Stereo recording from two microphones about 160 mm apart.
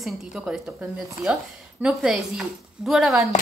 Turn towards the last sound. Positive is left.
turn(degrees=0)  # may be behind; listen again after turning